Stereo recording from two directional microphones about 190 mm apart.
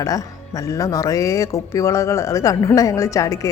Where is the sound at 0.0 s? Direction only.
15° left (ahead or behind).